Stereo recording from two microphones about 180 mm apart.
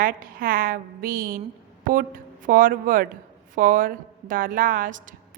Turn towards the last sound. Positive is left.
turn(degrees=-45)  # may be behind; listen again after turning